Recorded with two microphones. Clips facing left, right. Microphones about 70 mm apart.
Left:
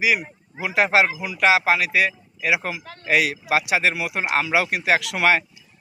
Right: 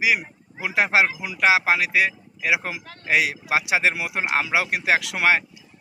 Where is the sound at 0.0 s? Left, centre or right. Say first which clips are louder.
Left 1 dB; centre.